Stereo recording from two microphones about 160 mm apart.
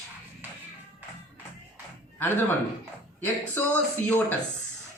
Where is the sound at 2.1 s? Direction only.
10° left (ahead or behind).